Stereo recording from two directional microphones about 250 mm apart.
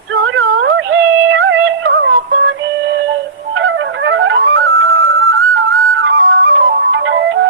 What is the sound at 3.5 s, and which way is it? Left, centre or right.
Flute, right.